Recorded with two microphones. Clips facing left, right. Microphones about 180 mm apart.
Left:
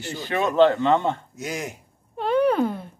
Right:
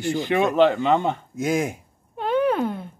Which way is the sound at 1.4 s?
50° right (ahead or behind).